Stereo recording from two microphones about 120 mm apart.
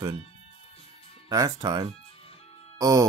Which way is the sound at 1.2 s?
30° right (ahead or behind).